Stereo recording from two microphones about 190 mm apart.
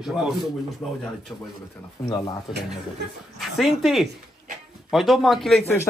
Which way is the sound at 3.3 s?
Centre (ahead or behind).